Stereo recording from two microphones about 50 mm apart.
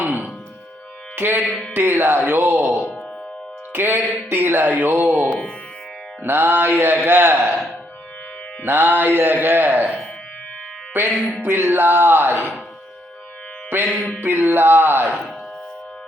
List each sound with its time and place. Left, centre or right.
0.0 s music: right
1.5 s music: centre
1.7 s music: right
5.1 s speech: right
6.2 s music: right
8.6 s music: right
10.9 s music: right
14.2 s music: right